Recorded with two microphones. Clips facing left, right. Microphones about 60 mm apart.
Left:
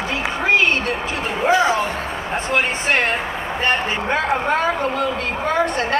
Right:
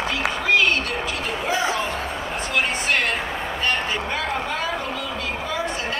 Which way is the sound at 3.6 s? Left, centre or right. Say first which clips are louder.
Left 5 dB; left.